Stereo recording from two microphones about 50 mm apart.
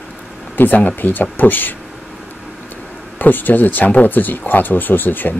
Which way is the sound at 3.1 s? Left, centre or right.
Left.